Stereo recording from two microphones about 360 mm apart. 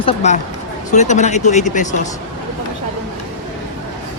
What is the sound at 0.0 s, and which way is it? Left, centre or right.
Speech, centre.